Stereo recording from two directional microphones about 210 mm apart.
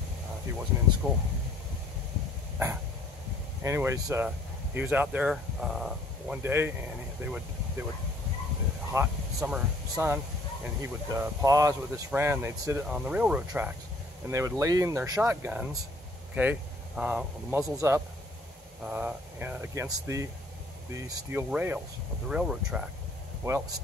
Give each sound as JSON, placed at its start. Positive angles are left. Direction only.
{"t": 1.0, "sound": "speech", "side_deg": -10}
{"t": 3.6, "sound": "speech", "side_deg": -15}
{"t": 8.9, "sound": "speech", "side_deg": -5}